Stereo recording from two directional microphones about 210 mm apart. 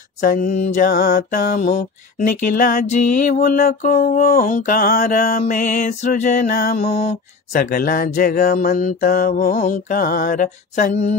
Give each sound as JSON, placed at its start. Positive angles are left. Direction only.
{"t": 0.2, "sound": "mantra", "side_deg": 40}
{"t": 6.9, "sound": "mantra", "side_deg": 30}
{"t": 7.5, "sound": "mantra", "side_deg": 45}